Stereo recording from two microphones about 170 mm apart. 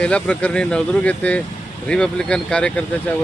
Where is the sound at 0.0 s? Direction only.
5° left (ahead or behind).